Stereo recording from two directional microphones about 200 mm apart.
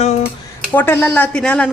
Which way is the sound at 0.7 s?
10° left (ahead or behind).